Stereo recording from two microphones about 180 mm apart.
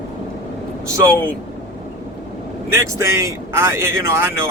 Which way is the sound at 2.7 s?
15° right (ahead or behind).